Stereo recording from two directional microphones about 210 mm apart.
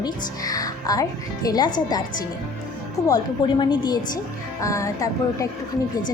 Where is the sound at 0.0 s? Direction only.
15° left (ahead or behind).